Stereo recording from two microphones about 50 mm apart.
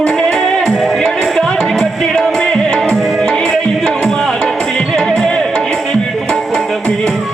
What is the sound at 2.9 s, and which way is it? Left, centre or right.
Music, centre.